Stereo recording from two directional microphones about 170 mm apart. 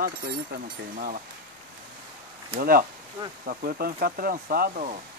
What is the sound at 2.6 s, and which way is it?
Speech, 60° right (ahead or behind).